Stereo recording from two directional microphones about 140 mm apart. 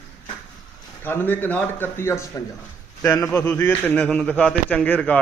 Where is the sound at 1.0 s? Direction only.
15° left (ahead or behind).